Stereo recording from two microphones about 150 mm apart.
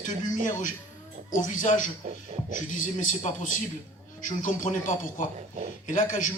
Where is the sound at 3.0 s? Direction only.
60° left (ahead or behind).